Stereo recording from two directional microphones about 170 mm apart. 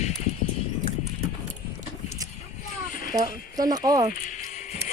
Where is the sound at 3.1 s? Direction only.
20° right (ahead or behind).